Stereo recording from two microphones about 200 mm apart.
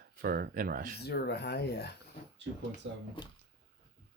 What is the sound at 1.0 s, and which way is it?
Speech, 55° left (ahead or behind).